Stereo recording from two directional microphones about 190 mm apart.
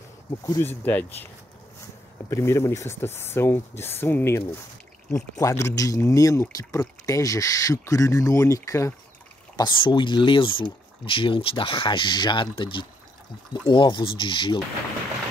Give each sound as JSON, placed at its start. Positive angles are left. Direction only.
{"t": 0.5, "sound": "speech", "side_deg": 10}